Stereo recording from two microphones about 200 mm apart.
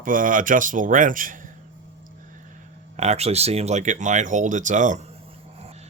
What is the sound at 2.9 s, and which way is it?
Speech, 35° right (ahead or behind).